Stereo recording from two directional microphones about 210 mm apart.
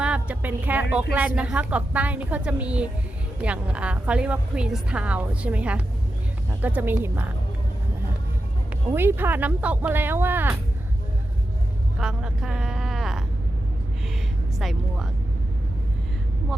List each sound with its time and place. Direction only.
0.0 s a woman's voice: 5° right (ahead or behind)
8.9 s speech: 10° right (ahead or behind)
11.9 s speech: centre (ahead or behind)
14.6 s speech: centre (ahead or behind)